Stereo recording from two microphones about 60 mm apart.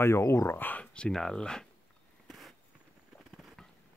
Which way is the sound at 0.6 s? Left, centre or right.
Left.